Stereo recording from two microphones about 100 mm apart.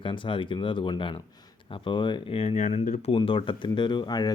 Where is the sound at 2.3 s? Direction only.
85° left.